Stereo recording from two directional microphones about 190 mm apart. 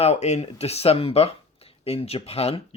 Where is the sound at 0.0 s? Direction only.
35° left (ahead or behind).